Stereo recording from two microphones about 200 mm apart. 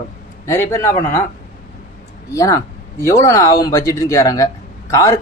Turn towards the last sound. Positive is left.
turn(degrees=15)  # may be behind; listen again after turning